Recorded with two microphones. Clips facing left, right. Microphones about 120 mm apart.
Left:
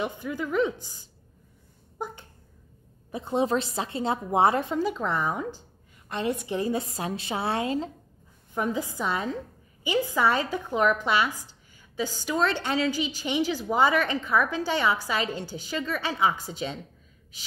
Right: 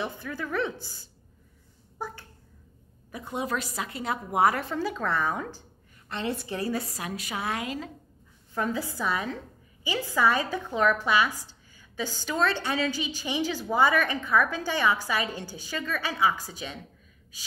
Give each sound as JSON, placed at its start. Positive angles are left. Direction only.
{"t": 0.0, "sound": "a woman's voice", "side_deg": 15}
{"t": 2.0, "sound": "a sound", "side_deg": 20}
{"t": 3.1, "sound": "a woman's voice", "side_deg": 30}
{"t": 8.5, "sound": "a woman's voice", "side_deg": 15}